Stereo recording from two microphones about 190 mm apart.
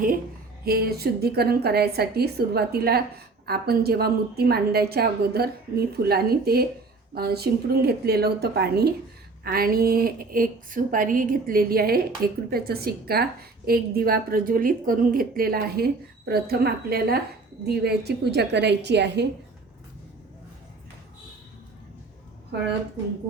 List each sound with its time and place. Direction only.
0.6 s a woman's voice: 55° right (ahead or behind)